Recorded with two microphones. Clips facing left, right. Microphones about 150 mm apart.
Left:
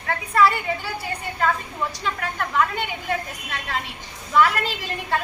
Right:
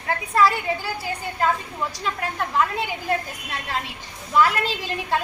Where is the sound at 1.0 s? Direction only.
Centre (ahead or behind).